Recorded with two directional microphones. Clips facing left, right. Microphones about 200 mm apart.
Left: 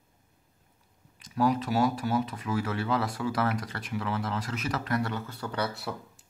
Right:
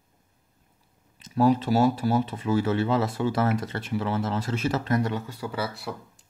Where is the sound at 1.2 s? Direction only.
25° right (ahead or behind).